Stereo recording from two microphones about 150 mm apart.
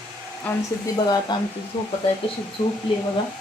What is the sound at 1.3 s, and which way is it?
Speech, 30° left (ahead or behind).